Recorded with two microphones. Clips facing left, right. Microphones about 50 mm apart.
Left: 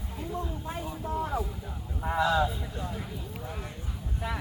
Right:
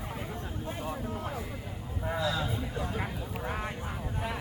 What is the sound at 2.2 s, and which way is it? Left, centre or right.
Speech, left.